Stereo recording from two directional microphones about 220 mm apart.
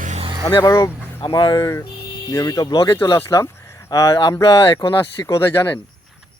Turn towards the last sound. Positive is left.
turn(degrees=10)  # may be behind; listen again after turning